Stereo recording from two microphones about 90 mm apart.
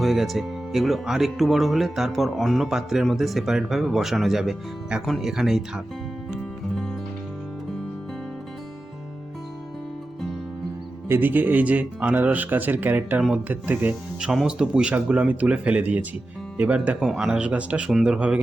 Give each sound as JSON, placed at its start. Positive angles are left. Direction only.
{"t": 0.0, "sound": "speech", "side_deg": 0}
{"t": 11.1, "sound": "speech", "side_deg": -20}
{"t": 14.3, "sound": "speech", "side_deg": -10}